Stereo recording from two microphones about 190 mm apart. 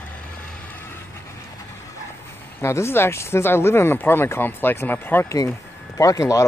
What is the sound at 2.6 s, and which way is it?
Speech, 15° left (ahead or behind).